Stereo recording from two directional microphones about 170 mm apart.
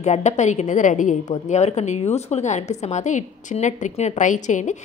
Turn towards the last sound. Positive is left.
turn(degrees=45)  # may be behind; listen again after turning